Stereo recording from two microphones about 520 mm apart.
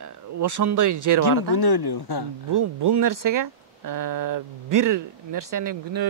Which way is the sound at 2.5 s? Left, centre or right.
Right.